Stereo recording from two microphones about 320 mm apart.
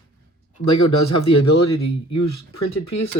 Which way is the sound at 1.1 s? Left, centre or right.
Left.